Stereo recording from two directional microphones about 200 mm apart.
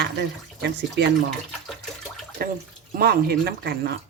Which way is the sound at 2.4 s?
50° right (ahead or behind).